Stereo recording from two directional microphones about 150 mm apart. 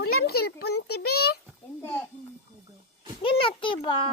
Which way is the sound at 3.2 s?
35° left (ahead or behind).